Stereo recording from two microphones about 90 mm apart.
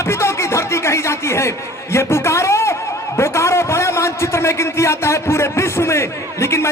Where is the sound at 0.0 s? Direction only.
30° left (ahead or behind).